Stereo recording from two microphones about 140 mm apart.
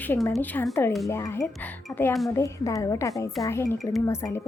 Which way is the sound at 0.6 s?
20° left (ahead or behind).